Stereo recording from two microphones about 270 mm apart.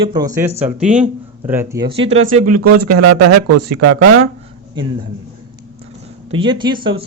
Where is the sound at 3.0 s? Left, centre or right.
Right.